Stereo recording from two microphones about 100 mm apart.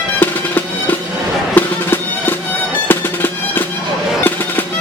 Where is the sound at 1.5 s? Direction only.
20° left (ahead or behind).